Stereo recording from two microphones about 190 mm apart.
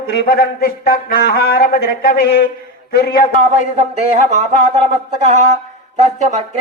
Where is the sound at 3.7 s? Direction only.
35° right (ahead or behind).